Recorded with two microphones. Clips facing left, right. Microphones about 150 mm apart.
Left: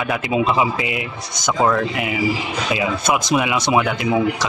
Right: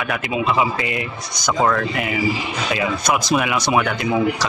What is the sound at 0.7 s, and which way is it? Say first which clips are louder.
A man's voice: even; 10° left (ahead or behind).